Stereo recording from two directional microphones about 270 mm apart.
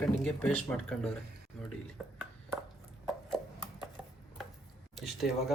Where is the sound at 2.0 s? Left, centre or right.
Centre.